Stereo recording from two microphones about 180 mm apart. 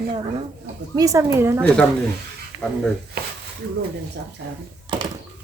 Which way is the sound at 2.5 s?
15° right (ahead or behind).